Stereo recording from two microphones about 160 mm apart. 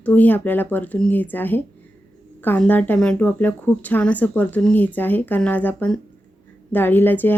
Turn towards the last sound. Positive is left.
turn(degrees=10)  # may be behind; listen again after turning